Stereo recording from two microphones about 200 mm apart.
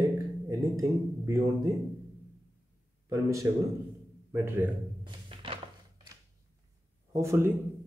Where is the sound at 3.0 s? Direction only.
15° right (ahead or behind).